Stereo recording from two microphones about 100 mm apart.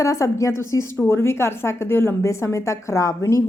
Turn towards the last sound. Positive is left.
turn(degrees=35)  # may be behind; listen again after turning